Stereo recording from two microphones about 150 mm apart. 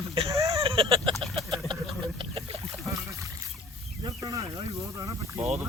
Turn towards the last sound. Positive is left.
turn(degrees=-20)  # may be behind; listen again after turning